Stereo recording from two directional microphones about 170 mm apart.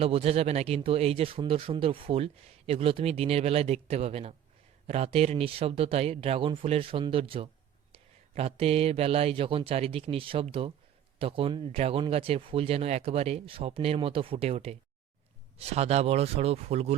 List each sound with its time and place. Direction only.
0.0 s speech: 35° right (ahead or behind)